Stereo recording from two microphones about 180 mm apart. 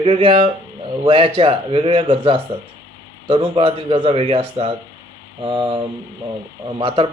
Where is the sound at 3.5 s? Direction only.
30° right (ahead or behind).